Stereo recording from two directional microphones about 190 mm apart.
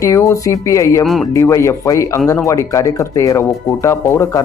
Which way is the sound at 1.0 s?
Centre (ahead or behind).